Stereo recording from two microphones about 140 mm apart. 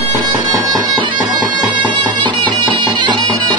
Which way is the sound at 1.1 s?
5° right (ahead or behind).